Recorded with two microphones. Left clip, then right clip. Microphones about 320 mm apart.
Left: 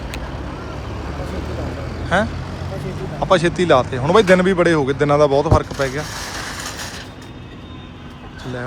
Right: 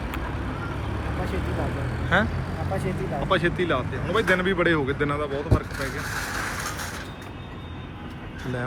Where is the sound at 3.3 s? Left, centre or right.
Centre.